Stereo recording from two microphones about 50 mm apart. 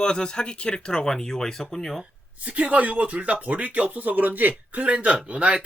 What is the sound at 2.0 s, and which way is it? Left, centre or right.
Speech, right.